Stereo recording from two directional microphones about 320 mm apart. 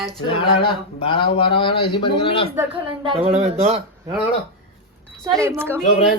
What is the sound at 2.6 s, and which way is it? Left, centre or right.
Speech, centre.